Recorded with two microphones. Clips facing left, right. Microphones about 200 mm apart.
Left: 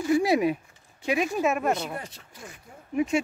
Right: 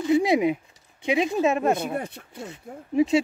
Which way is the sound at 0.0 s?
20° right (ahead or behind).